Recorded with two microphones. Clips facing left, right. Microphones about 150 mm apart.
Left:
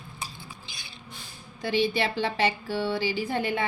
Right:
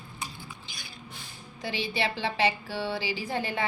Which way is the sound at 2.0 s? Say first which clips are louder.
Left 1 dB; 45° left (ahead or behind).